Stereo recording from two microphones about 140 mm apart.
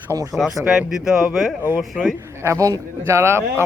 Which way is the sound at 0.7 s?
5° right (ahead or behind).